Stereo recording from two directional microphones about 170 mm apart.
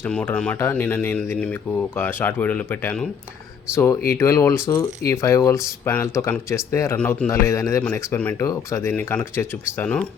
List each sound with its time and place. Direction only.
0.0 s speech: 10° left (ahead or behind)